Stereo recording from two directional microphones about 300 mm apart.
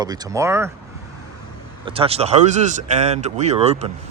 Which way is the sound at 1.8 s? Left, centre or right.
Centre.